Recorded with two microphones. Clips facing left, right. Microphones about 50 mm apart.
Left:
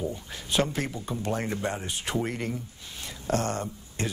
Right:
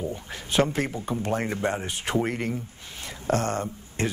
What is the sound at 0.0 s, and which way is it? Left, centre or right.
Speech, right.